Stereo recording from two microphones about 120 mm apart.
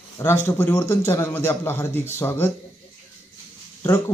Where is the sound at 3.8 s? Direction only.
25° left (ahead or behind).